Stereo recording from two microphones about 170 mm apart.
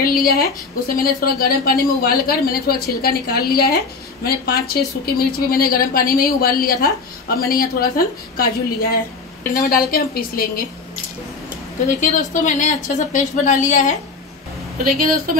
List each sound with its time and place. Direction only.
0.0 s a woman's voice: 60° left (ahead or behind)
11.9 s speech: 45° left (ahead or behind)